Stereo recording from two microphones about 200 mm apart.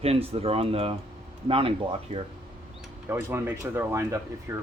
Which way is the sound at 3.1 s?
15° right (ahead or behind).